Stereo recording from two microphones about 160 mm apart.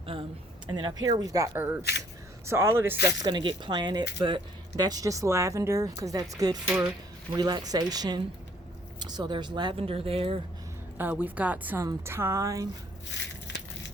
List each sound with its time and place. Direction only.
0.0 s a woman's voice: 35° right (ahead or behind); by 2.9 s 15° right (ahead or behind)
3.1 s speech: 30° right (ahead or behind)
7.3 s speech: 25° right (ahead or behind)
10.9 s a woman's voice: 10° right (ahead or behind)
13.1 s crushing: 90° left